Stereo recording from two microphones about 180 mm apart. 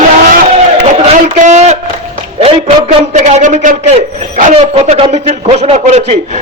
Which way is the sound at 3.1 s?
45° right (ahead or behind).